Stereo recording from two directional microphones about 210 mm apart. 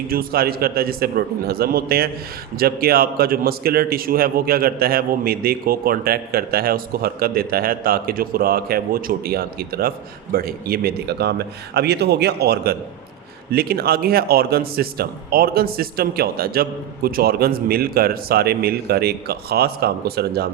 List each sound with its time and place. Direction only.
0.1 s a man's voice: 45° right (ahead or behind)